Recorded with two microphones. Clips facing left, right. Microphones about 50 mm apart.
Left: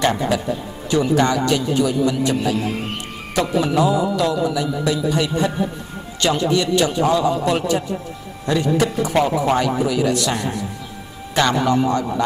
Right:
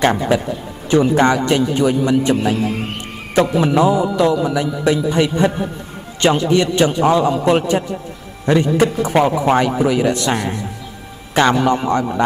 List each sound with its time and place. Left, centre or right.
0.0 s a man's voice: right
3.6 s a man's voice: right